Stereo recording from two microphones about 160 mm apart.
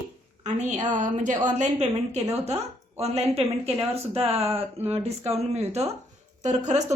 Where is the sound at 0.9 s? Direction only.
50° right (ahead or behind).